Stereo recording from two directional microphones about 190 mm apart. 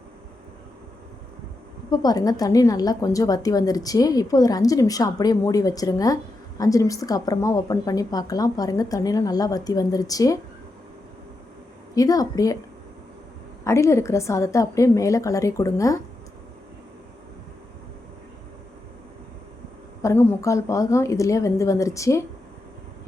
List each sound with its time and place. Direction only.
1.9 s a woman's voice: 20° left (ahead or behind)
11.9 s a woman's voice: 20° left (ahead or behind)
13.7 s a woman's voice: 15° left (ahead or behind)
20.0 s a woman's voice: 15° left (ahead or behind)